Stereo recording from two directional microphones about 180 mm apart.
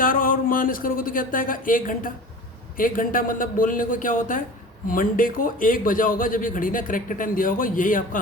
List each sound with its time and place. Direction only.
0.0 s speech: 50° left (ahead or behind)